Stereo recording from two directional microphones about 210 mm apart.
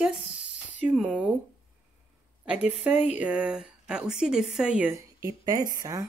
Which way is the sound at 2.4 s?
5° right (ahead or behind).